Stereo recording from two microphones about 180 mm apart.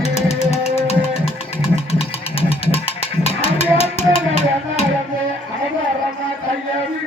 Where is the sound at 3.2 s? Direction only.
35° left (ahead or behind).